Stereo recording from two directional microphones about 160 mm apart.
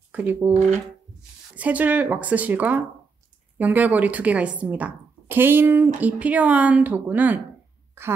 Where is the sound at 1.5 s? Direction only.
10° right (ahead or behind).